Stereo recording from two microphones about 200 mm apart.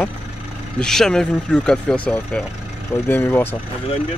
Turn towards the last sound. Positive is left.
turn(degrees=10)  # may be behind; listen again after turning